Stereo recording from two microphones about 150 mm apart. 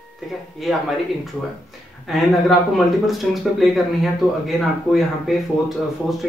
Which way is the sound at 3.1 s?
Centre (ahead or behind).